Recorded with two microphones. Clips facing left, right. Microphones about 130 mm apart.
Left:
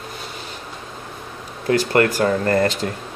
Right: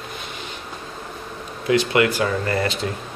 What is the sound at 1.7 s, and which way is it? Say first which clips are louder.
Speech: left 1 dB; 45° left (ahead or behind).